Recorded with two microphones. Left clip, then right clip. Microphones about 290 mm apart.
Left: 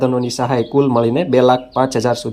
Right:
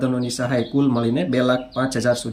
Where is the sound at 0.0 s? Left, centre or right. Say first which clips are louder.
Left 6 dB; centre.